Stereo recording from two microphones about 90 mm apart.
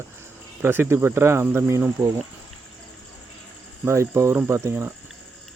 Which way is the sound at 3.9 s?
35° right (ahead or behind).